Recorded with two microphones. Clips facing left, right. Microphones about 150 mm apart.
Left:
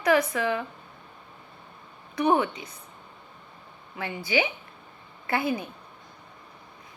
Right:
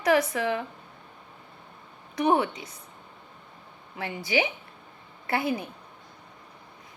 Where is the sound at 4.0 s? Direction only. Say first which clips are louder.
Even; 35° right (ahead or behind).